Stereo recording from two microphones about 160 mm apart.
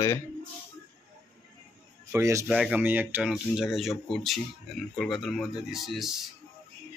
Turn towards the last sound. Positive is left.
turn(degrees=0)  # may be behind; listen again after turning